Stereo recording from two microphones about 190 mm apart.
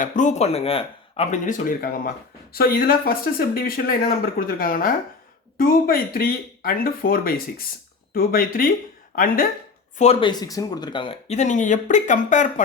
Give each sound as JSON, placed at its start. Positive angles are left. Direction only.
{"t": 0.0, "sound": "speech", "side_deg": 40}
{"t": 10.0, "sound": "speech", "side_deg": 30}